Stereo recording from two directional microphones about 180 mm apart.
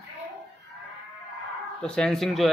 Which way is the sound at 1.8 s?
5° left (ahead or behind).